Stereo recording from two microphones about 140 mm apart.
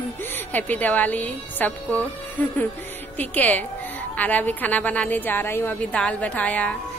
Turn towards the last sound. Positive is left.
turn(degrees=10)  # may be behind; listen again after turning